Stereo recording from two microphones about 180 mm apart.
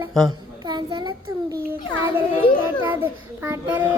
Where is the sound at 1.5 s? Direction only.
55° right (ahead or behind).